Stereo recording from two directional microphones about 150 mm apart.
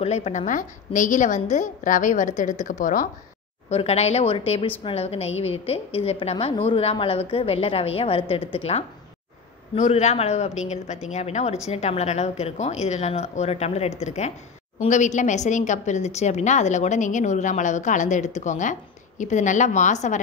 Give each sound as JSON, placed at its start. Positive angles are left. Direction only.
{"t": 0.0, "sound": "a woman's voice", "side_deg": 45}
{"t": 3.7, "sound": "a woman's voice", "side_deg": 45}